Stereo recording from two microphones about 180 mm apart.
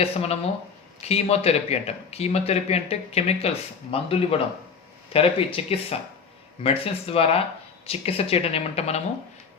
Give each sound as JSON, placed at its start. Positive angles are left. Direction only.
{"t": 0.0, "sound": "speech", "side_deg": 35}